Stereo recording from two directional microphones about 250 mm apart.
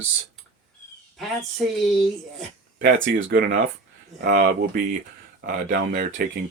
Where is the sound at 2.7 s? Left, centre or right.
Right.